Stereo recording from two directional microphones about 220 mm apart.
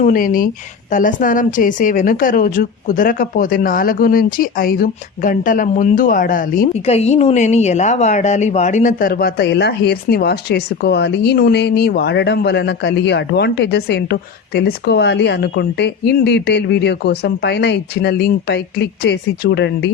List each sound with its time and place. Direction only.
0.0 s a woman's voice: 40° left (ahead or behind)